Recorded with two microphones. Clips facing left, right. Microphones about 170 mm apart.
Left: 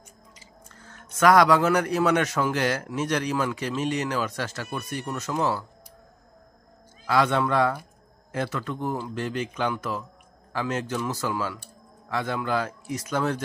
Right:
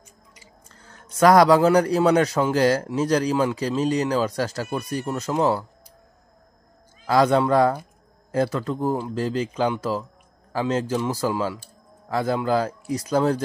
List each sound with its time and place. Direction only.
0.7 s a man's voice: 35° right (ahead or behind)
7.1 s a man's voice: 35° right (ahead or behind)